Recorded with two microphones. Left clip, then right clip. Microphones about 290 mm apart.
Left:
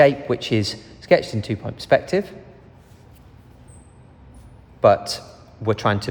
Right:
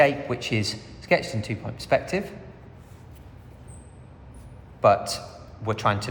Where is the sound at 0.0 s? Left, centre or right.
Left.